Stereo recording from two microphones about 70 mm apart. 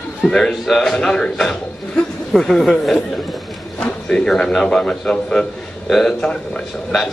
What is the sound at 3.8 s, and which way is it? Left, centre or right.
A man's voice, centre.